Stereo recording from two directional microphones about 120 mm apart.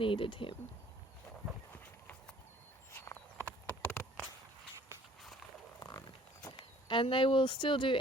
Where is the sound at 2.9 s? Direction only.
20° left (ahead or behind).